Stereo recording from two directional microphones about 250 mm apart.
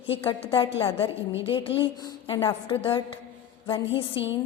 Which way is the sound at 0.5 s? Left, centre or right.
Left.